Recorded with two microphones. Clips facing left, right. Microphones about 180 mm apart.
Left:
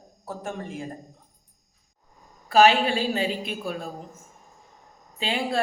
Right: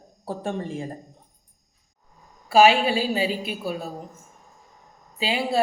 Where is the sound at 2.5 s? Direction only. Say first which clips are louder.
Right 1 dB; 10° right (ahead or behind).